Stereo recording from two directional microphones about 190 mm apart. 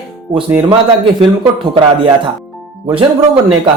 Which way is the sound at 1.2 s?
25° right (ahead or behind).